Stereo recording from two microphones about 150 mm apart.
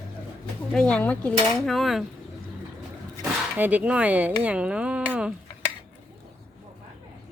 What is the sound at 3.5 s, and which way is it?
Speech, 10° right (ahead or behind).